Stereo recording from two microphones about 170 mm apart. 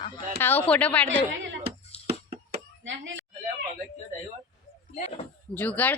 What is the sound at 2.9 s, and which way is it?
Speech, 90° right.